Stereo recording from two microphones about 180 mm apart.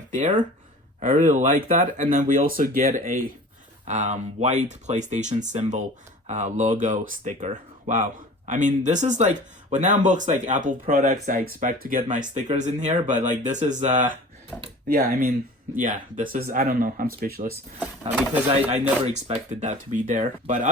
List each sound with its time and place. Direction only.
0.1 s speech: 45° right (ahead or behind)
18.7 s speech: 40° right (ahead or behind)